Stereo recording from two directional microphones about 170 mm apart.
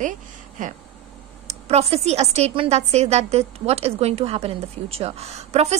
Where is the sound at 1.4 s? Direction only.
40° right (ahead or behind).